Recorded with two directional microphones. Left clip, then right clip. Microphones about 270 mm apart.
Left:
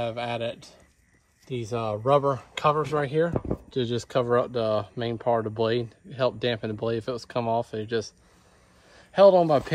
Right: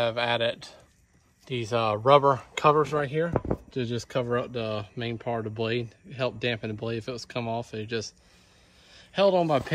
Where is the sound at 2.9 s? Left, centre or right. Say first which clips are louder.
Left 2 dB; centre.